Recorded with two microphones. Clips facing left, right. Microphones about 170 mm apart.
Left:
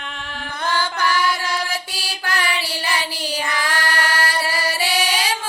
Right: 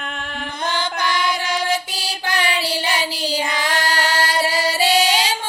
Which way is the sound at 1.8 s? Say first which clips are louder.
Right 2 dB; 25° right (ahead or behind).